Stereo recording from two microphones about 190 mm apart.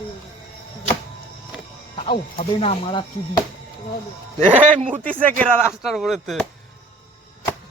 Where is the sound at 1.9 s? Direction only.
30° left (ahead or behind).